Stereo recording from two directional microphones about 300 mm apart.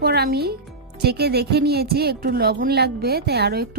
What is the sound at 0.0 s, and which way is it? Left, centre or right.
Speech, right.